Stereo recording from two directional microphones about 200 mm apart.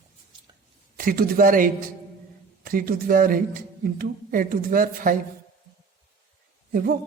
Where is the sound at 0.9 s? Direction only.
45° right (ahead or behind).